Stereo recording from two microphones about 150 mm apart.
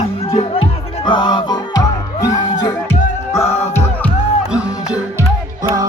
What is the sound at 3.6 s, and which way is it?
Music, 15° left (ahead or behind).